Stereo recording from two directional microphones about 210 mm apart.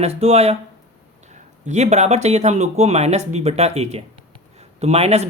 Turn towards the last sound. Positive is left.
turn(degrees=-30)  # may be behind; listen again after turning